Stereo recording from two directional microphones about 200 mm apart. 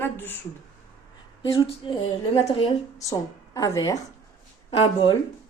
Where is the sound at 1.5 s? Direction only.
25° left (ahead or behind).